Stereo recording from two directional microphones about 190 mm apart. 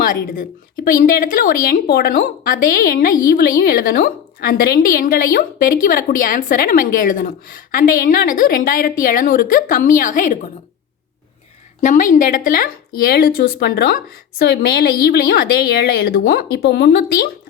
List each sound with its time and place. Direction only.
0.0 s a woman's voice: 45° left (ahead or behind)
11.8 s a woman's voice: 45° left (ahead or behind)